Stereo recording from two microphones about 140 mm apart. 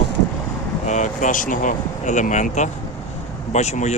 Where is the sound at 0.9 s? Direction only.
60° left (ahead or behind).